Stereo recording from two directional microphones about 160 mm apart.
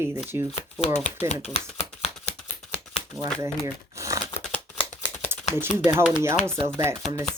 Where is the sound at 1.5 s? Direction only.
40° left (ahead or behind).